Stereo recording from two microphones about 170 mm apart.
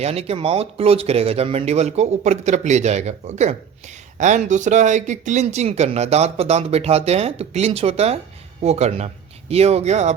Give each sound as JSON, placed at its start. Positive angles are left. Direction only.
{"t": 0.0, "sound": "speech", "side_deg": -35}